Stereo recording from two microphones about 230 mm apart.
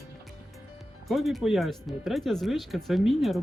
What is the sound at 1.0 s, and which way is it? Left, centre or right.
Speech, centre.